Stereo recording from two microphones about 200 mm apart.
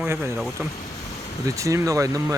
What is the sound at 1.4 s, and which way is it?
Speech, 15° right (ahead or behind).